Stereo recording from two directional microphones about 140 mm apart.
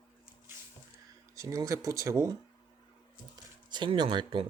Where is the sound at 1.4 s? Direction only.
25° right (ahead or behind).